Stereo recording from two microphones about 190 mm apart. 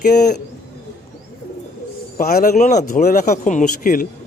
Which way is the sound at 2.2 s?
50° left (ahead or behind).